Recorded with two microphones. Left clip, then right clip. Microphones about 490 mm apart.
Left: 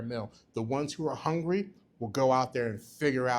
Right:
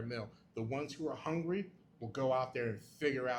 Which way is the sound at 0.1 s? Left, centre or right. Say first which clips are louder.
Left 7 dB; left.